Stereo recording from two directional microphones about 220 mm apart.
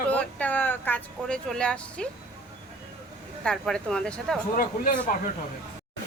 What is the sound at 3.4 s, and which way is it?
Speech, 5° left (ahead or behind).